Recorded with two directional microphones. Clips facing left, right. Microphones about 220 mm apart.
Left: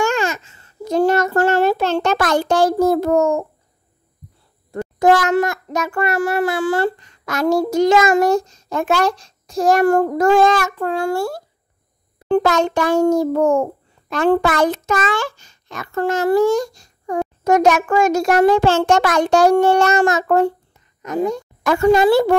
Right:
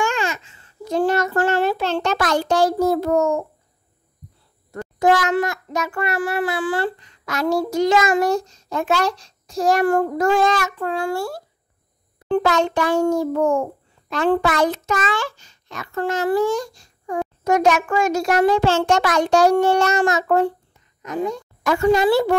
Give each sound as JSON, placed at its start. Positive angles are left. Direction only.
{"t": 0.0, "sound": "child singing", "side_deg": 45}
{"t": 4.9, "sound": "a child's voice", "side_deg": 45}